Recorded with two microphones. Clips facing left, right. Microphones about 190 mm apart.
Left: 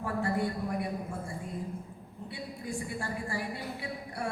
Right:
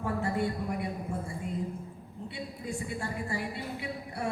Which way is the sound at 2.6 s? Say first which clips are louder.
Even; 25° right (ahead or behind).